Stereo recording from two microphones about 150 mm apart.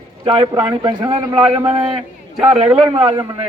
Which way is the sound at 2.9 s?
30° right (ahead or behind).